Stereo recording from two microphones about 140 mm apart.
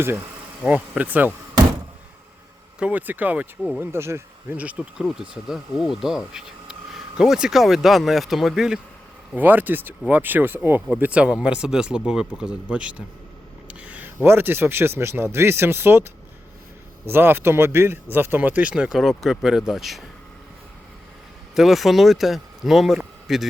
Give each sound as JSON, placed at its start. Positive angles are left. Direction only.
{"t": 0.7, "sound": "speech", "side_deg": -10}
{"t": 2.7, "sound": "speech", "side_deg": -10}
{"t": 17.1, "sound": "speech", "side_deg": -15}
{"t": 21.5, "sound": "speech", "side_deg": 0}